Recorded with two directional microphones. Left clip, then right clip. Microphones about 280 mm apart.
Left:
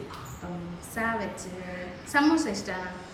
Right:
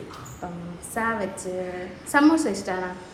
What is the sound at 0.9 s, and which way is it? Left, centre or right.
A woman's voice, centre.